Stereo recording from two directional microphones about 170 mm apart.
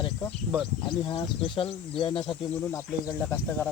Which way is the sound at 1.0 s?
30° left (ahead or behind).